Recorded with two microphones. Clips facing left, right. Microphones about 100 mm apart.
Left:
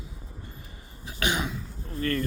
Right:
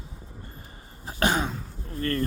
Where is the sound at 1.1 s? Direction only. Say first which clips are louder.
Right 4 dB; 40° right (ahead or behind).